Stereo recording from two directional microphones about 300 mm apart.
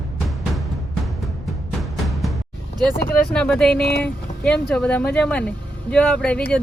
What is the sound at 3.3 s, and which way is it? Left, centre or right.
Speech, centre.